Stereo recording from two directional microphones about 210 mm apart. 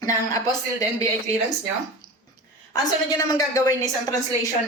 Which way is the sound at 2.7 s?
15° left (ahead or behind).